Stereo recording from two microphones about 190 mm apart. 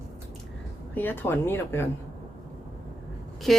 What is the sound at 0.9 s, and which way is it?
Speech, 10° left (ahead or behind).